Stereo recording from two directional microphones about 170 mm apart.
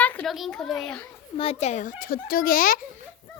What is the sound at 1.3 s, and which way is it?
A child's voice, 35° left (ahead or behind).